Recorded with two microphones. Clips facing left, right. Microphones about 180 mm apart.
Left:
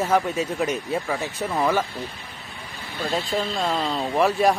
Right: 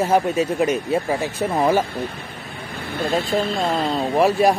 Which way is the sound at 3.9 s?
10° right (ahead or behind).